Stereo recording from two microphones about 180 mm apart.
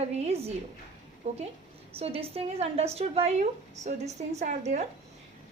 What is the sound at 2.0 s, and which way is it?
A woman's voice, 35° right (ahead or behind).